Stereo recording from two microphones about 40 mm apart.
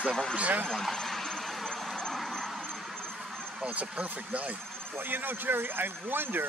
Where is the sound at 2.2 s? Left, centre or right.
Centre.